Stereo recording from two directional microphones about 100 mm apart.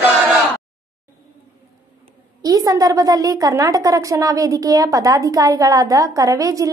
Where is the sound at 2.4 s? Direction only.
40° right (ahead or behind).